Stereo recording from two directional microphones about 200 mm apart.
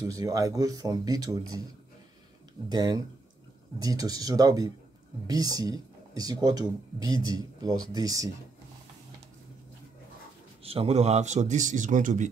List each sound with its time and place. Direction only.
0.1 s speech: 15° right (ahead or behind)
2.7 s speech: 20° right (ahead or behind)
10.6 s a man's voice: 30° right (ahead or behind)